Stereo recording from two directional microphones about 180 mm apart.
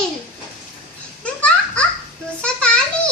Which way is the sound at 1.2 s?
5° left (ahead or behind).